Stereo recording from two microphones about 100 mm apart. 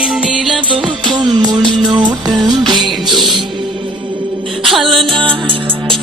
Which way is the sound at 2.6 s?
50° right (ahead or behind).